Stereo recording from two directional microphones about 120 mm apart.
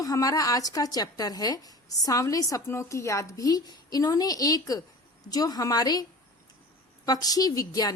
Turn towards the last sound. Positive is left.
turn(degrees=30)  # may be behind; listen again after turning